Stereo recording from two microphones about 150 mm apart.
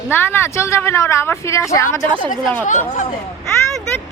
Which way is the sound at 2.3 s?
55° left (ahead or behind).